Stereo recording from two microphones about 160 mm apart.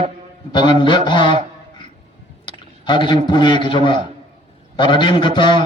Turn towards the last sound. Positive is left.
turn(degrees=30)  # may be behind; listen again after turning